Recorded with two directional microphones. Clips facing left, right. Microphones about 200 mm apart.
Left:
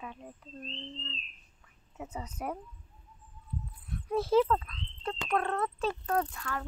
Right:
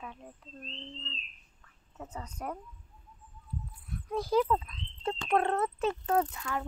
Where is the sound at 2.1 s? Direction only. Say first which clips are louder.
Left 2 dB; 5° left (ahead or behind).